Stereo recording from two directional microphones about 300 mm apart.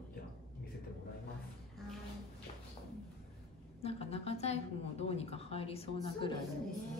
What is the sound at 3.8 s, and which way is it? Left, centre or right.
A woman's voice, centre.